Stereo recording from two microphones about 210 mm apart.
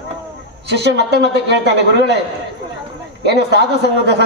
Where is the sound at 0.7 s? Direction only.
55° right (ahead or behind).